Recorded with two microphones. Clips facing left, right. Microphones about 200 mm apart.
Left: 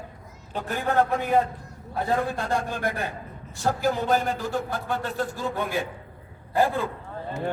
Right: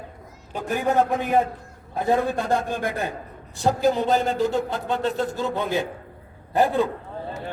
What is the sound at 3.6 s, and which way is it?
A man's voice, 20° right (ahead or behind).